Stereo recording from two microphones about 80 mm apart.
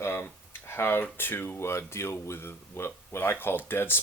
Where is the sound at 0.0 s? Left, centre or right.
Left.